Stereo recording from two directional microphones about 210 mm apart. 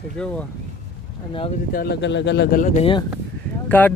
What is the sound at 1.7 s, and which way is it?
Speech, 45° left (ahead or behind).